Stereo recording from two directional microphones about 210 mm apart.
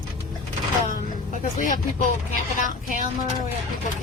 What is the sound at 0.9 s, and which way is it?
Vehicle, 35° left (ahead or behind).